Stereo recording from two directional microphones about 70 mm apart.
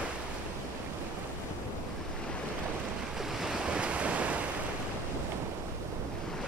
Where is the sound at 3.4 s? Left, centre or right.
Centre.